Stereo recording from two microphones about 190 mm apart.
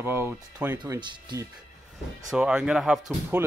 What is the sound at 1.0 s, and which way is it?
Speech, 25° right (ahead or behind).